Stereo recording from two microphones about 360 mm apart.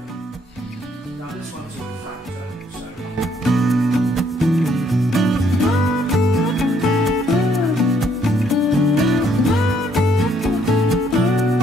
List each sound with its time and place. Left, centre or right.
3.2 s music: centre